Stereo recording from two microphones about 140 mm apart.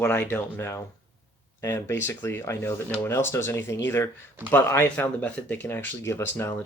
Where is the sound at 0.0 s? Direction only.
15° left (ahead or behind).